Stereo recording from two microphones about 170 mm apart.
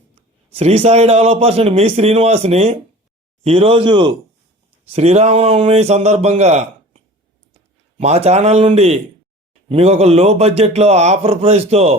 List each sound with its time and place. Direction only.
0.5 s a man's voice: 35° right (ahead or behind)
4.9 s a man's voice: 35° right (ahead or behind)